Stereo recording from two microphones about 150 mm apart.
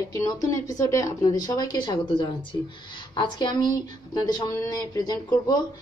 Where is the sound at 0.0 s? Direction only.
25° left (ahead or behind).